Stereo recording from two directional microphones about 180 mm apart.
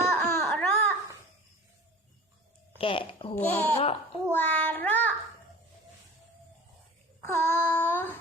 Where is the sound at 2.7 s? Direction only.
30° left (ahead or behind).